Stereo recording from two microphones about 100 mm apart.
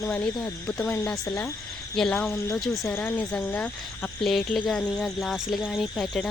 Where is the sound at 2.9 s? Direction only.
20° left (ahead or behind).